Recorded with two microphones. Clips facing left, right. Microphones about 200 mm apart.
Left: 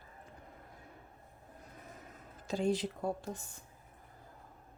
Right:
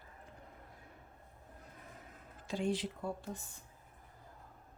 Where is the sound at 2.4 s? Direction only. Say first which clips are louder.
Left 3 dB; 40° left (ahead or behind).